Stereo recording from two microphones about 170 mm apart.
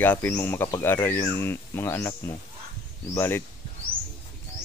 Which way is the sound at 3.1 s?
15° left (ahead or behind).